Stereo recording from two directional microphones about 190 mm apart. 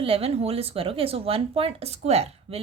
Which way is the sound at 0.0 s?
30° right (ahead or behind).